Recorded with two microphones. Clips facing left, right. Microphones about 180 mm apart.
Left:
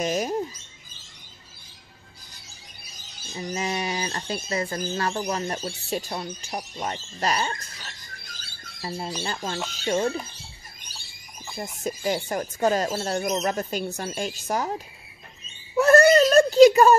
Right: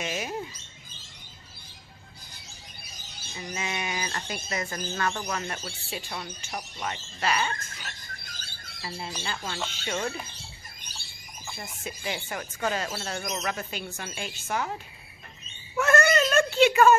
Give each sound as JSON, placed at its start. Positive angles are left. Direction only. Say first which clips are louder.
{"t": 0.0, "sound": "speech", "louder": "left 7 dB", "side_deg": 40}
{"t": 3.3, "sound": "speech", "louder": "left 5 dB", "side_deg": 35}
{"t": 8.8, "sound": "speech", "louder": "left 5 dB", "side_deg": 40}
{"t": 11.5, "sound": "speech", "louder": "left 9 dB", "side_deg": 40}
{"t": 15.7, "sound": "a sound", "louder": "left 7 dB", "side_deg": 35}